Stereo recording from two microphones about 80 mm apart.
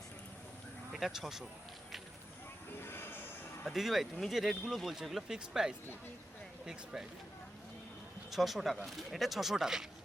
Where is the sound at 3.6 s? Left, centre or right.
Centre.